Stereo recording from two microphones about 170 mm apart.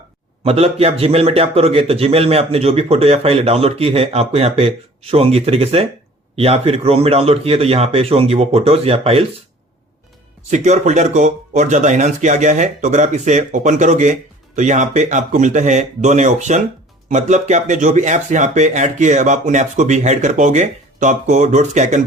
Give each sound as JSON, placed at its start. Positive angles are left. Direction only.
{"t": 0.4, "sound": "a man's voice", "side_deg": -35}
{"t": 10.5, "sound": "speech", "side_deg": -45}